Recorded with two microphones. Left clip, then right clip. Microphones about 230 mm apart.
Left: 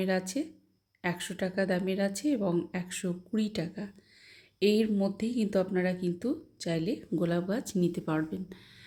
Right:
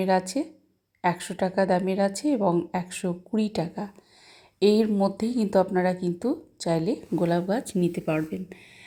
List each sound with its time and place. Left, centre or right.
0.4 s a woman's voice: centre